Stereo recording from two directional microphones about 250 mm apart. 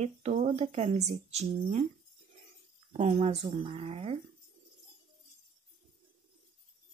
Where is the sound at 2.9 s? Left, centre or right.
Right.